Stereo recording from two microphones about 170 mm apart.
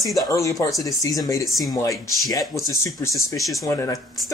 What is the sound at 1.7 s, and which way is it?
Speech, 20° left (ahead or behind).